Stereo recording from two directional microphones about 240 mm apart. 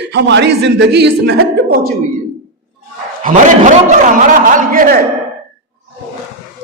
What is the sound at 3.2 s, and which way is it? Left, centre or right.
A man's voice, right.